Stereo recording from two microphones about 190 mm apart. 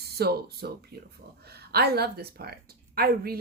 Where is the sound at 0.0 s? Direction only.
55° right (ahead or behind).